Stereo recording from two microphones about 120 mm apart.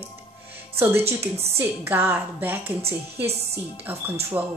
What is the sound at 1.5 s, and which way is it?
A woman's voice, 20° right (ahead or behind).